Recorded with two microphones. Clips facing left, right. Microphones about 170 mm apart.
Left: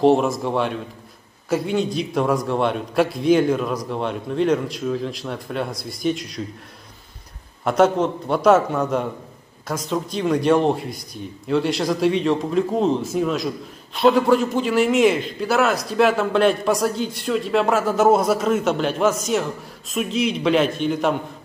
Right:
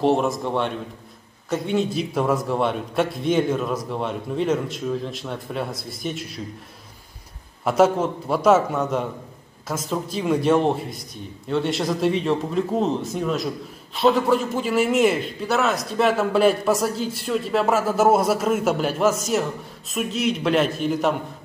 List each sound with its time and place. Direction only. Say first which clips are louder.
0.0 s a man's voice: left 3 dB; centre (ahead or behind)
7.6 s a man's voice: left 1 dB; 5° right (ahead or behind)